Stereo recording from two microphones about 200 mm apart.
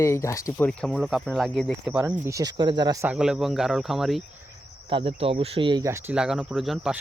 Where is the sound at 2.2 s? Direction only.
15° right (ahead or behind); by 4.2 s centre (ahead or behind).